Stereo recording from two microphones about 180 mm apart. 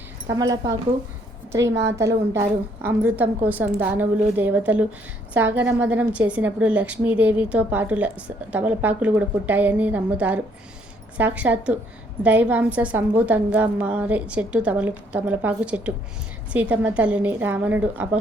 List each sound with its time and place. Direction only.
0.3 s a woman's voice: 20° right (ahead or behind)
1.6 s a woman's voice: 70° right (ahead or behind)
1.9 s a woman's voice: 15° right (ahead or behind)